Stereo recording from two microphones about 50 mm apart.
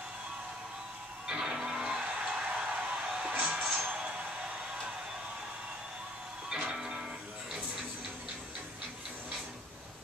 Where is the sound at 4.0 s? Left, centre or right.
Right.